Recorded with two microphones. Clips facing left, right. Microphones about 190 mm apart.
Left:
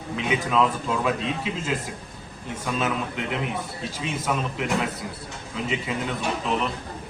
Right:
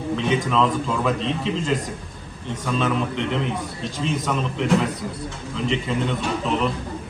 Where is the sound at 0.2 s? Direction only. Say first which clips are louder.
Right 1 dB; 5° left (ahead or behind).